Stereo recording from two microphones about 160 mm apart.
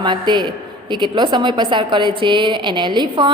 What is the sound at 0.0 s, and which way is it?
A woman's voice, 30° right (ahead or behind).